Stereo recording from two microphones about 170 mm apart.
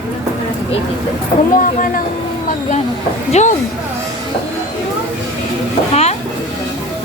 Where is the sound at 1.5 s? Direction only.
55° left (ahead or behind).